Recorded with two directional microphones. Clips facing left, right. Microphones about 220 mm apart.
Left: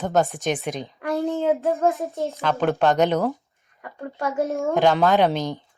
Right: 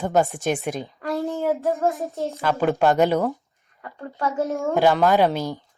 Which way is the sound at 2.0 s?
15° left (ahead or behind).